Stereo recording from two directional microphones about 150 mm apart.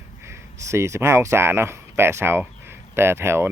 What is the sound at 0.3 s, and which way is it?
Speech, 20° right (ahead or behind).